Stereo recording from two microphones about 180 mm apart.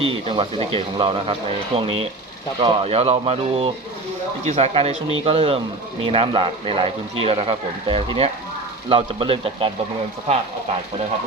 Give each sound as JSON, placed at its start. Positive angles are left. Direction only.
{"t": 0.0, "sound": "speech", "side_deg": -30}